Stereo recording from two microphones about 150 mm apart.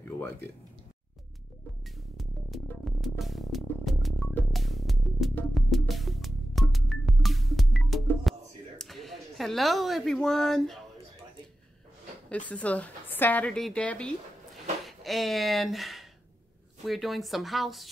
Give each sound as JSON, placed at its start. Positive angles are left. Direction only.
{"t": 2.1, "sound": "music", "side_deg": 0}
{"t": 12.3, "sound": "a woman's voice", "side_deg": 10}